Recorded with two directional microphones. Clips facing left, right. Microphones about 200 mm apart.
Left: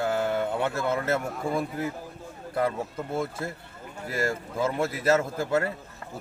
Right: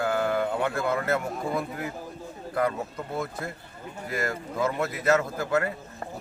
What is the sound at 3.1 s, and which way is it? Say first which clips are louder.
A man's voice: left 2 dB; 25° left (ahead or behind).